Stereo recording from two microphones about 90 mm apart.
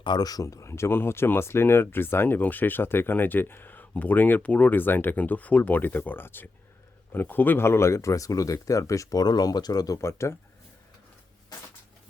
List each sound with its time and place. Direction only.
0.0 s speech: 50° left (ahead or behind); by 10.3 s 30° left (ahead or behind)